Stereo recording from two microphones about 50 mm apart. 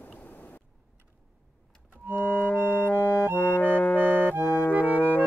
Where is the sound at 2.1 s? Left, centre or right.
Left.